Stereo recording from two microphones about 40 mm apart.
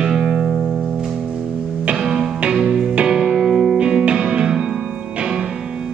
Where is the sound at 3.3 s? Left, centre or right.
Centre.